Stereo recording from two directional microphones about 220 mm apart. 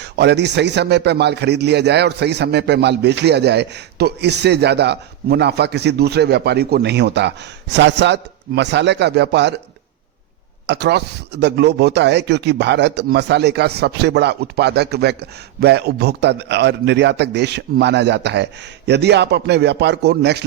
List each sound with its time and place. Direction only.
0.0 s a man's voice: 50° right (ahead or behind)
10.7 s a man's voice: 50° right (ahead or behind)